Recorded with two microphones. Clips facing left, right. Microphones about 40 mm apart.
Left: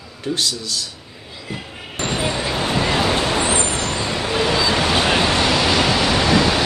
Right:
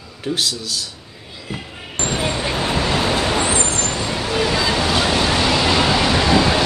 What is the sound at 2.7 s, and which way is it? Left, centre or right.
Vehicle, left.